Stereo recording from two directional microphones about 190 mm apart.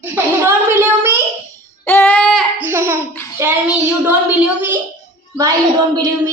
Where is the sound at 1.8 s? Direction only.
10° left (ahead or behind).